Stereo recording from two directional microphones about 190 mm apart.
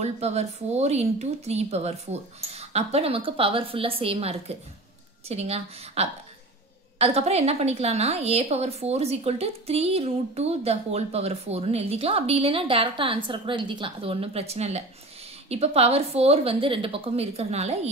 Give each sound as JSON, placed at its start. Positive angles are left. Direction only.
{"t": 0.0, "sound": "a woman's voice", "side_deg": -35}